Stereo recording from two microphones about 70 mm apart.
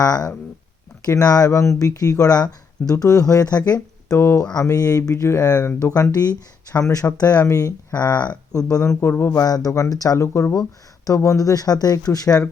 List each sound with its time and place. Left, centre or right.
0.0 s speech: left
2.9 s speech: left
4.2 s speech: left
4.6 s speech: left
5.9 s speech: left
6.7 s speech: left
8.1 s speech: left
8.7 s speech: left
9.0 s speech: left
9.4 s speech: left
10.2 s speech: left